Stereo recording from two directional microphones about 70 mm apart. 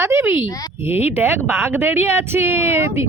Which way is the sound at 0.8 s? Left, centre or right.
Right.